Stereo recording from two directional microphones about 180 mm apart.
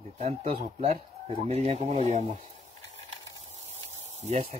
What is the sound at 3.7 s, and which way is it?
Spray, 35° right (ahead or behind).